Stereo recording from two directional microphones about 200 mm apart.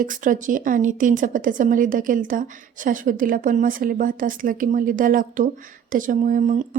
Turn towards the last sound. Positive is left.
turn(degrees=-40)  # may be behind; listen again after turning